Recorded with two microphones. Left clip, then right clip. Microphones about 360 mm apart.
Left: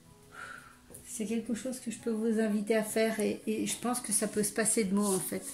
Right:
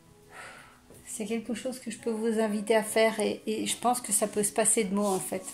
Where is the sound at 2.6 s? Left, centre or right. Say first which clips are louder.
Right 7 dB; centre.